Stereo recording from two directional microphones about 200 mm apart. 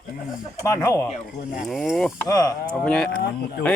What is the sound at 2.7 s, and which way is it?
Speech, 5° left (ahead or behind).